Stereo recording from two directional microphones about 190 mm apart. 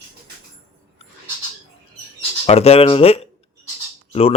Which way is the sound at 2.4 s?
30° left (ahead or behind).